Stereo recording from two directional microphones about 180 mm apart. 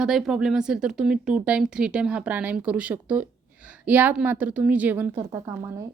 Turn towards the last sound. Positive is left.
turn(degrees=-15)  # may be behind; listen again after turning